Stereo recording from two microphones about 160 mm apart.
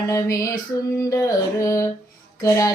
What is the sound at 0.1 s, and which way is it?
Female singing, 20° left (ahead or behind).